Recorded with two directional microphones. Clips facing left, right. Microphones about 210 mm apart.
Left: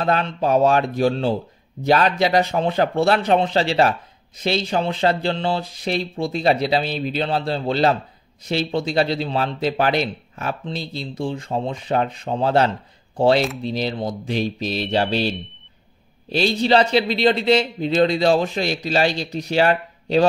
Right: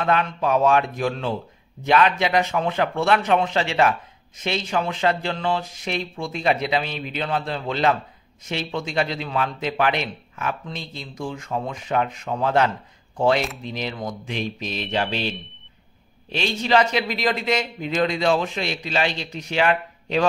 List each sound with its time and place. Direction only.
0.0 s speech: 35° left (ahead or behind)